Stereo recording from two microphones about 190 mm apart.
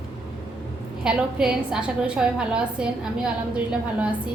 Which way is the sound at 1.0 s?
5° right (ahead or behind).